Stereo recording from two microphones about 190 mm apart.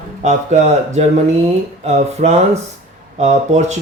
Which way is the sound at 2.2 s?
40° right (ahead or behind).